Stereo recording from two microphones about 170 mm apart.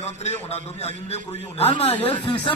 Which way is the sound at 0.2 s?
40° left (ahead or behind).